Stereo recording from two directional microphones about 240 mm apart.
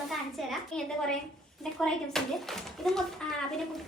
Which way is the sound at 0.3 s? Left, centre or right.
Centre.